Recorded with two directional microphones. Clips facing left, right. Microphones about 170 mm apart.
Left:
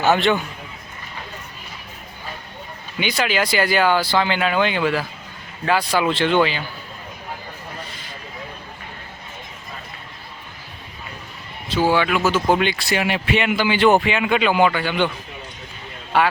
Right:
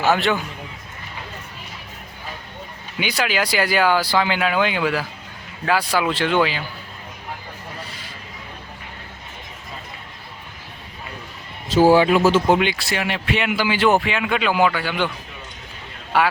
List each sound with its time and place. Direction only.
0.0 s speech: centre (ahead or behind)
3.0 s speech: 10° right (ahead or behind)
11.7 s speech: 40° right (ahead or behind)
12.5 s speech: 10° right (ahead or behind)
12.9 s speech: 5° left (ahead or behind)